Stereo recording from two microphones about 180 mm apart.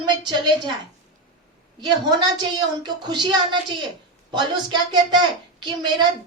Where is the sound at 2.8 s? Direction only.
25° right (ahead or behind).